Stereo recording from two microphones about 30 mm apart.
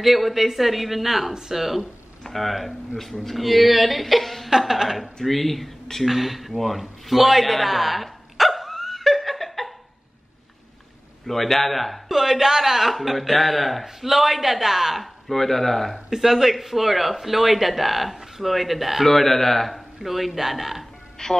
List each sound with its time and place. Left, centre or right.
0.0 s speech: centre
4.5 s a woman's voice: centre
5.2 s speech: centre
6.0 s a sound: centre
11.2 s a man's voice: centre
12.1 s a woman's voice: centre
15.2 s a man's voice: centre
16.1 s speech: centre
19.0 s speech: centre
20.0 s a woman's voice: centre
21.2 s music: left